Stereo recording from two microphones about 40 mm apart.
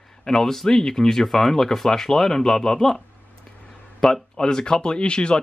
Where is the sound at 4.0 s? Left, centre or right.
Centre.